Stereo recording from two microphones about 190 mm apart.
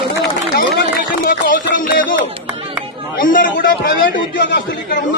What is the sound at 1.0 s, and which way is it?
A man's voice, 50° left (ahead or behind).